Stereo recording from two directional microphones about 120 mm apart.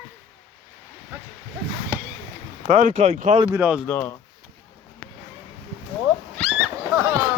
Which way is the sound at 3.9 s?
15° left (ahead or behind).